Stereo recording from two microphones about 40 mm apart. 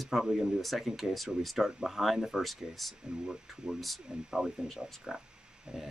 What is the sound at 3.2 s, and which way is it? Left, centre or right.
Speech, centre.